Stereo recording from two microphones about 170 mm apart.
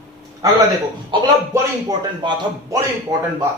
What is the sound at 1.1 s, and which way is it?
Speech, 30° right (ahead or behind).